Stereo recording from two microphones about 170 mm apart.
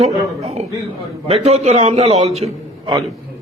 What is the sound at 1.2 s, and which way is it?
A man's voice, 35° right (ahead or behind).